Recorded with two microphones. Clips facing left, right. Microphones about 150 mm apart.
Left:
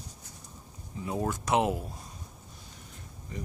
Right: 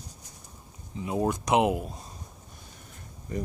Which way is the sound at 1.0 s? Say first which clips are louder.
Right 4 dB; 20° right (ahead or behind).